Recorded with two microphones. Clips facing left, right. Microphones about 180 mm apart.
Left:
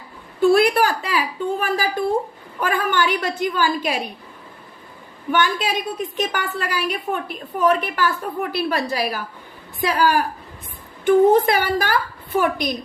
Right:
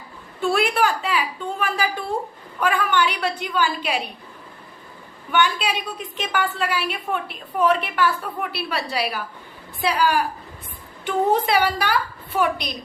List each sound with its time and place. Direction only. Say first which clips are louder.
0.5 s a woman's voice: left 1 dB; 40° left (ahead or behind)
5.3 s a woman's voice: left 1 dB; 40° left (ahead or behind)